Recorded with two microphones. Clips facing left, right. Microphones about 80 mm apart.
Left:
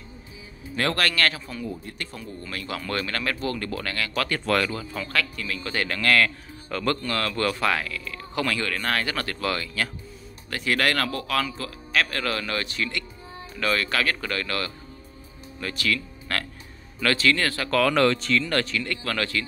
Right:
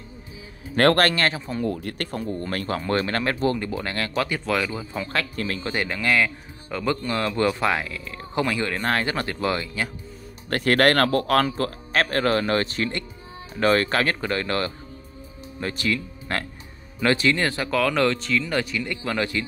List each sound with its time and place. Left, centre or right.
0.7 s speech: right
1.1 s speech: right
1.7 s speech: right
2.0 s speech: right
2.8 s speech: right
3.5 s speech: centre
4.3 s speech: centre
4.7 s speech: right
5.7 s speech: centre
10.5 s speech: right
17.6 s speech: centre